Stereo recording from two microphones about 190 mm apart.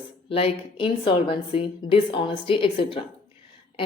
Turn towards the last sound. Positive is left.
turn(degrees=25)  # may be behind; listen again after turning